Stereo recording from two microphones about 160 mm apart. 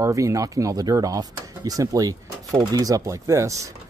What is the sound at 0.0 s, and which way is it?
Speech, 20° right (ahead or behind).